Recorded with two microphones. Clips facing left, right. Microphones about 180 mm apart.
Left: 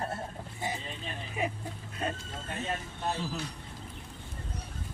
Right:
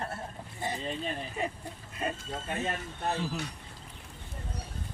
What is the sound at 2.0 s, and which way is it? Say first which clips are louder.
Speech: even; 5° right (ahead or behind).